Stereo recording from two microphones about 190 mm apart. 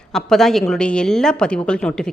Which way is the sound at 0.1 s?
Centre (ahead or behind).